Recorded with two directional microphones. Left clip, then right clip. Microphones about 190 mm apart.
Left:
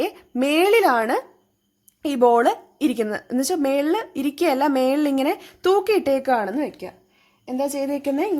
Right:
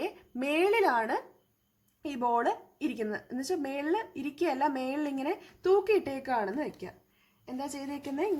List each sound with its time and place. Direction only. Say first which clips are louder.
0.0 s a woman's voice: left 11 dB; 30° left (ahead or behind)